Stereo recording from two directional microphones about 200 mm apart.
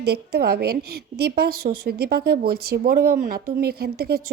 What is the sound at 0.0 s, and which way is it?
A woman's voice, 55° right (ahead or behind).